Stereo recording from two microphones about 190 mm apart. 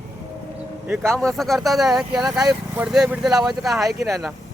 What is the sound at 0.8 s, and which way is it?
Speech, 10° right (ahead or behind).